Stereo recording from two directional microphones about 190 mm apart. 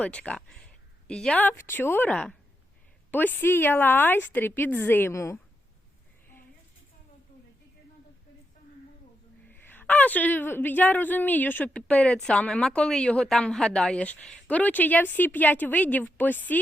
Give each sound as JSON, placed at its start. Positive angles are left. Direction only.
{"t": 0.0, "sound": "a woman's voice", "side_deg": 5}
{"t": 9.5, "sound": "a woman's voice", "side_deg": 10}